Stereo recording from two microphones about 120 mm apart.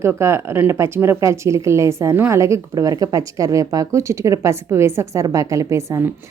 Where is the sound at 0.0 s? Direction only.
20° right (ahead or behind).